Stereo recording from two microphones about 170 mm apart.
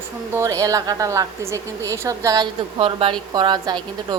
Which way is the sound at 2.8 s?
30° right (ahead or behind).